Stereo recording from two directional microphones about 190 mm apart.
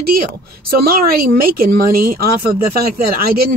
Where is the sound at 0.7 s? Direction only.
50° right (ahead or behind).